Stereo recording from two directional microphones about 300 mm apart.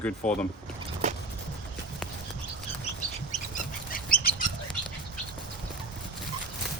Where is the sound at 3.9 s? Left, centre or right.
Left.